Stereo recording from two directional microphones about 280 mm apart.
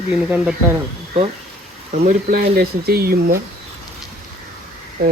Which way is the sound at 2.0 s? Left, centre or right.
Right.